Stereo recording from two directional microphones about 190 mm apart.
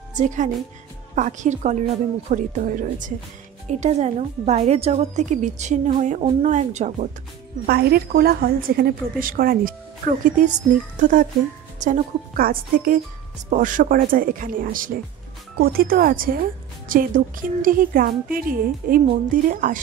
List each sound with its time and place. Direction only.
0.1 s a woman's voice: 40° right (ahead or behind)
7.6 s speech: 55° right (ahead or behind)